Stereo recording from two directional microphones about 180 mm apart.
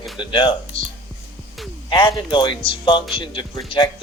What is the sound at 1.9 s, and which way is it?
Speech, 25° left (ahead or behind).